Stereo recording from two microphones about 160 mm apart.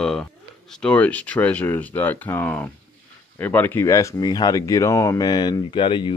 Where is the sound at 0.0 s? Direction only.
5° left (ahead or behind).